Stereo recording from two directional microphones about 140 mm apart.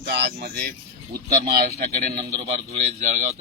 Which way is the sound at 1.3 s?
90° right.